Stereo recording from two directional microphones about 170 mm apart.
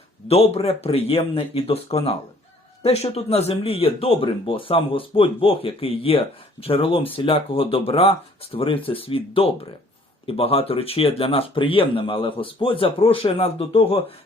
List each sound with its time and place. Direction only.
0.3 s speech: 35° left (ahead or behind)